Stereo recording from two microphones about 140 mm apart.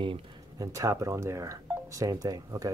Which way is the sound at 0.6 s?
25° right (ahead or behind).